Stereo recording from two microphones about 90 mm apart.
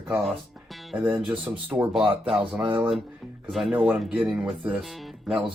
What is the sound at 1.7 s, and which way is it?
Speech, 20° right (ahead or behind).